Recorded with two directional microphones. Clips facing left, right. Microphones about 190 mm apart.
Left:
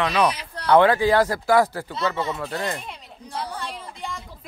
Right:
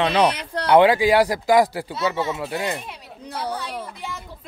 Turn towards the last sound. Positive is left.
turn(degrees=-5)  # may be behind; listen again after turning